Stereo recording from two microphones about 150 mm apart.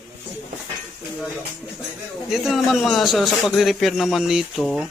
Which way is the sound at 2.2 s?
Centre (ahead or behind).